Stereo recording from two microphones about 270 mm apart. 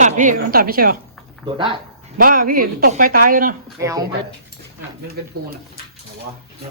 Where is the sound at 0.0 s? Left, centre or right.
Right.